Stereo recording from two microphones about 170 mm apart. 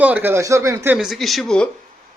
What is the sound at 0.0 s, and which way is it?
Speech, 10° right (ahead or behind).